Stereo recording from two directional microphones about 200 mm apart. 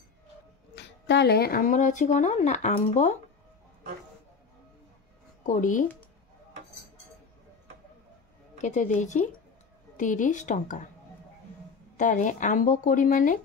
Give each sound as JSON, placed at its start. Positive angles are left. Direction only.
{"t": 0.7, "sound": "speech", "side_deg": 60}
{"t": 5.4, "sound": "speech", "side_deg": 40}
{"t": 8.5, "sound": "a woman's voice", "side_deg": 35}
{"t": 12.0, "sound": "speech", "side_deg": 40}